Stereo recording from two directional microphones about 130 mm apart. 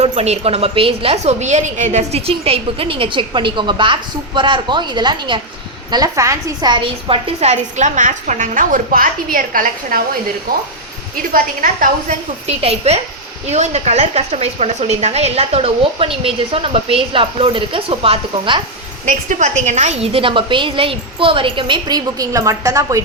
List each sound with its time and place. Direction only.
0.0 s a woman's voice: 55° right (ahead or behind); by 10.0 s 90° right
11.2 s a woman's voice: 90° right
12.5 s a woman's voice: 55° right (ahead or behind)
19.0 s a woman's voice: 70° right (ahead or behind); by 23.0 s 25° right (ahead or behind)